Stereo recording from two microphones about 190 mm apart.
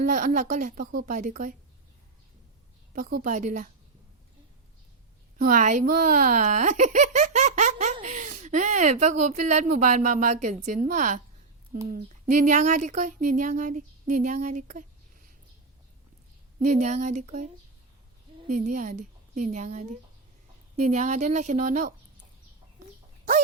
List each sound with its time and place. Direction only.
0.0 s a woman's voice: 45° right (ahead or behind)
2.9 s a woman's voice: 50° right (ahead or behind)
5.4 s speech: 45° right (ahead or behind)
16.6 s speech: 35° right (ahead or behind)